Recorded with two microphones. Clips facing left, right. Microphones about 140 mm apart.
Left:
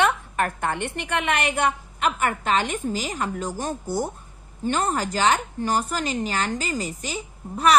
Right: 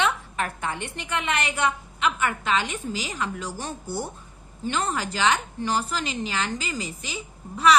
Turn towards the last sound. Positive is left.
turn(degrees=50)  # may be behind; listen again after turning